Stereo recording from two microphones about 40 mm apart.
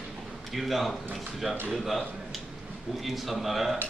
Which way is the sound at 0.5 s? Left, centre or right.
Centre.